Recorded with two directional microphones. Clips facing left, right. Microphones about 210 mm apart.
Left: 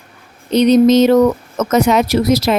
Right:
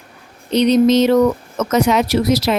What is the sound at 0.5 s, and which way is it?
Speech, 45° left (ahead or behind).